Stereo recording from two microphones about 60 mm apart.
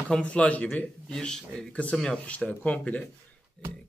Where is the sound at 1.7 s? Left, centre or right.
Left.